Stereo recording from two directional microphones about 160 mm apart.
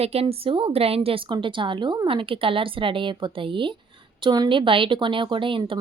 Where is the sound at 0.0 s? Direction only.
40° right (ahead or behind).